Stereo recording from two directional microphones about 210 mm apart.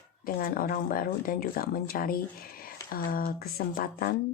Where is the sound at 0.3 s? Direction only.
40° left (ahead or behind).